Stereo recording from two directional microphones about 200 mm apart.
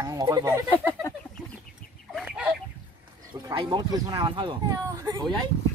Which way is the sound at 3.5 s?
25° right (ahead or behind).